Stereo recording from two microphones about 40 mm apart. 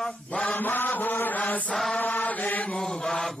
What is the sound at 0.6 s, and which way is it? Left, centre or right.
Chant, left.